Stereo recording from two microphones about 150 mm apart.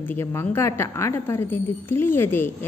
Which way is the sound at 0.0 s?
15° left (ahead or behind).